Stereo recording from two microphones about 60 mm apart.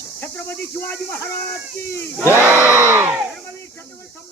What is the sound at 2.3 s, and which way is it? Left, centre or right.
Crowd, right.